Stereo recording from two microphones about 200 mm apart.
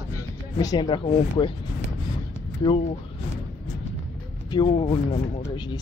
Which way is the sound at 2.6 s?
25° left (ahead or behind).